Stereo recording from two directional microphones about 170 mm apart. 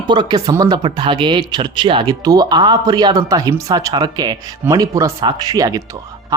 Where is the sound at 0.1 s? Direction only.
25° right (ahead or behind).